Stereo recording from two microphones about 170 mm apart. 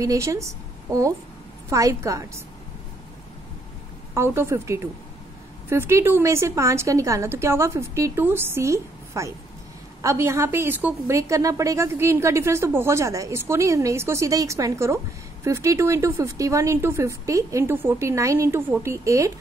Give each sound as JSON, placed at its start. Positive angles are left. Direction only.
{"t": 0.0, "sound": "a woman's voice", "side_deg": -20}
{"t": 4.1, "sound": "a woman's voice", "side_deg": -15}